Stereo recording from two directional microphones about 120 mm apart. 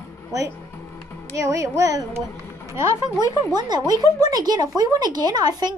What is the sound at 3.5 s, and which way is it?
Speech, 35° right (ahead or behind).